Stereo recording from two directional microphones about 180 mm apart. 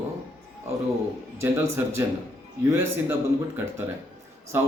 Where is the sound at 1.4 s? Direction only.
15° right (ahead or behind).